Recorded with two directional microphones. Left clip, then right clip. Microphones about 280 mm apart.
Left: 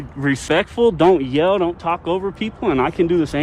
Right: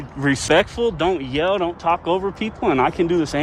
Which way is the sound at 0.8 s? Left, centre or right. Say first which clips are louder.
Left 6 dB; centre.